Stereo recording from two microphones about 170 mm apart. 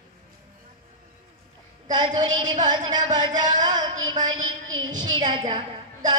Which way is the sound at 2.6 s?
25° right (ahead or behind).